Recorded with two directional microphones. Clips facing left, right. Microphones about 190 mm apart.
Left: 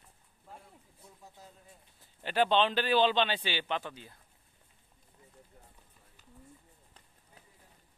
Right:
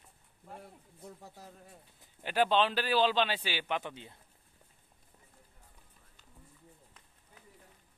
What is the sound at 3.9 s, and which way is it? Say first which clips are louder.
Speech: right 1 dB; 25° right (ahead or behind).